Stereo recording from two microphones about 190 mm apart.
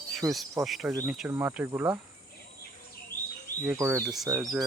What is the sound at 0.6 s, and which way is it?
Speech, centre (ahead or behind).